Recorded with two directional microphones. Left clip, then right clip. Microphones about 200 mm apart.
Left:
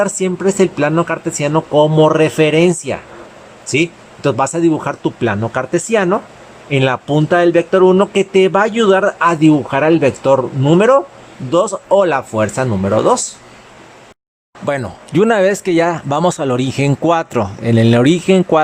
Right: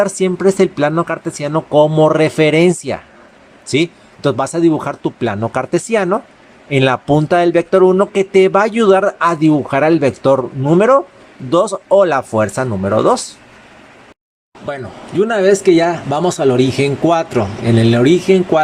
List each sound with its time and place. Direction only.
0.0 s speech: 15° right (ahead or behind)
11.9 s speech: centre (ahead or behind)
12.1 s speech: 15° right (ahead or behind)
14.8 s speech: 40° left (ahead or behind)